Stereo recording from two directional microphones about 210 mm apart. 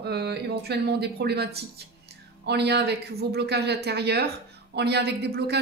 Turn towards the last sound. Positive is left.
turn(degrees=-50)  # may be behind; listen again after turning